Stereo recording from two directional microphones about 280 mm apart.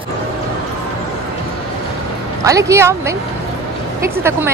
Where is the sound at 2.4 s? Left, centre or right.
Centre.